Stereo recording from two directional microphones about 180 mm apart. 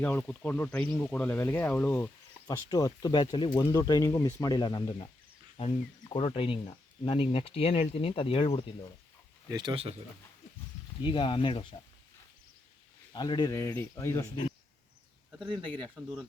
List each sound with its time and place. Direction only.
0.0 s speech: 10° left (ahead or behind)
2.5 s speech: 20° left (ahead or behind)
9.5 s speech: 25° right (ahead or behind)
11.0 s speech: 25° left (ahead or behind)
13.1 s speech: 25° left (ahead or behind)